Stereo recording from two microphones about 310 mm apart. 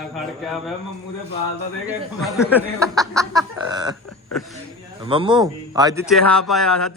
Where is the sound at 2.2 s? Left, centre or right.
Centre.